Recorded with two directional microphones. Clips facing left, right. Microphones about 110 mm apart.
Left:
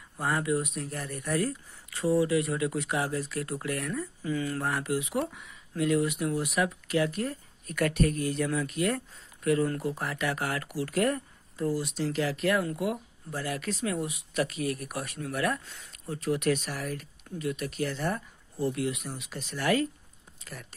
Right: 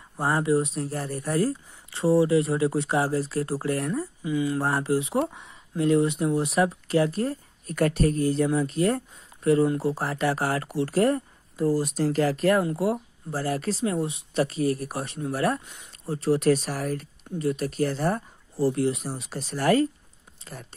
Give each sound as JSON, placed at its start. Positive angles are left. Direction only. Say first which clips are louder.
{"t": 0.2, "sound": "speech", "louder": "right 5 dB", "side_deg": -30}
{"t": 4.2, "sound": "speech", "louder": "right 5 dB", "side_deg": -15}
{"t": 4.6, "sound": "speech", "louder": "right 5 dB", "side_deg": -30}
{"t": 15.6, "sound": "speech", "louder": "right 1 dB", "side_deg": -15}
{"t": 16.1, "sound": "speech", "louder": "right 6 dB", "side_deg": -30}